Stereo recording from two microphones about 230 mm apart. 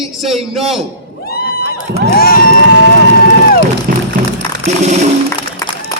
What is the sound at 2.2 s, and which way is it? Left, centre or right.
Music, left.